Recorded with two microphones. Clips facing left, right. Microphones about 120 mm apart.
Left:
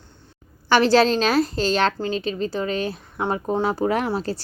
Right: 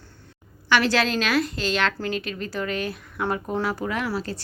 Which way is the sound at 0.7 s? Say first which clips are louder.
Left 5 dB; 30° left (ahead or behind).